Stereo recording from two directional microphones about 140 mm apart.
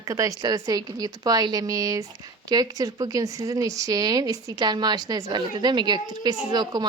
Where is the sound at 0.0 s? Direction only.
25° right (ahead or behind).